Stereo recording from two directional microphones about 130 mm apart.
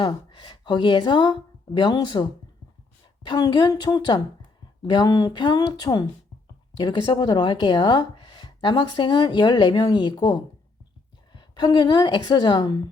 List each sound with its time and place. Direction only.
0.1 s speech: 40° left (ahead or behind)